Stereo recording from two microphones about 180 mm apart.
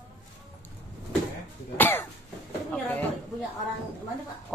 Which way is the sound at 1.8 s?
10° left (ahead or behind).